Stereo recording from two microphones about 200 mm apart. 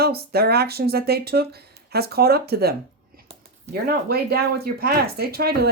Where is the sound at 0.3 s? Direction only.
50° right (ahead or behind).